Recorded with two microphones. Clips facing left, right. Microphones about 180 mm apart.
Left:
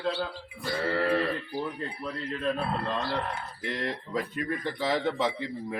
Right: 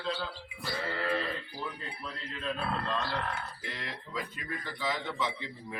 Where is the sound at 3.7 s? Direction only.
50° left (ahead or behind).